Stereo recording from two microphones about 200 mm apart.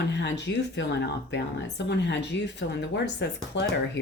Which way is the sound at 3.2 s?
60° left (ahead or behind).